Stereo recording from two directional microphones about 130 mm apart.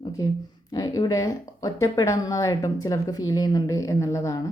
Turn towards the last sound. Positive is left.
turn(degrees=25)  # may be behind; listen again after turning